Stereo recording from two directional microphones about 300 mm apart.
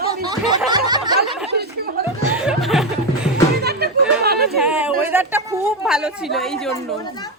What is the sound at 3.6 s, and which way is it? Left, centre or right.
Chatter, right.